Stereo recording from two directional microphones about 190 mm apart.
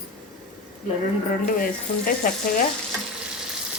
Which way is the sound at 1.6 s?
50° left (ahead or behind).